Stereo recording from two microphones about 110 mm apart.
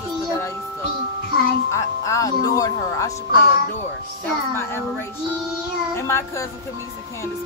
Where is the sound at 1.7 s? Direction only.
30° left (ahead or behind).